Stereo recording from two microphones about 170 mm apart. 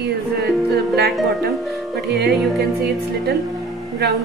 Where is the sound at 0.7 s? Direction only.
70° right (ahead or behind).